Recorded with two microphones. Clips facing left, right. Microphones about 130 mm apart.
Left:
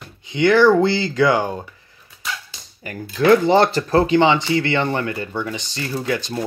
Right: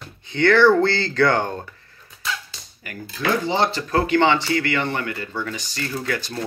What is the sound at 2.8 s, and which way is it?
Speech, 25° left (ahead or behind).